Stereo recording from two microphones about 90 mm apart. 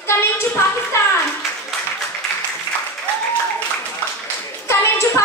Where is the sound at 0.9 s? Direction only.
30° left (ahead or behind).